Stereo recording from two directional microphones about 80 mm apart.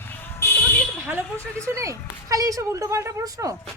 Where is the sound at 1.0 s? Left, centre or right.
Centre.